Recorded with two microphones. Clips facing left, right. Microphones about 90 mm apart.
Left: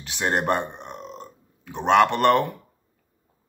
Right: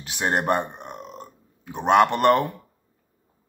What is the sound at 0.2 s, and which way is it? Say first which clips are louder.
Speech: right 1 dB; 10° right (ahead or behind).